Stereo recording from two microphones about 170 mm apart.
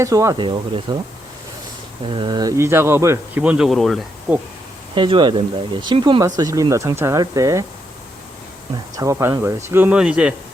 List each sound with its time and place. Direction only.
0.0 s speech: 20° right (ahead or behind)
0.4 s speech: 30° right (ahead or behind)
2.0 s speech: 30° right (ahead or behind); by 4.4 s centre (ahead or behind)
4.9 s speech: 30° right (ahead or behind)
9.0 s speech: 15° right (ahead or behind)